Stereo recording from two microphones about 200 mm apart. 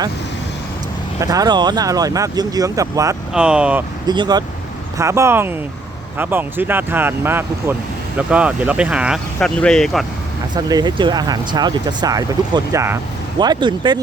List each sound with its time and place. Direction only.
1.2 s speech: 20° right (ahead or behind)
3.3 s speech: 5° right (ahead or behind)
4.0 s speech: 20° right (ahead or behind); by 10.1 s centre (ahead or behind)
10.5 s speech: 20° right (ahead or behind)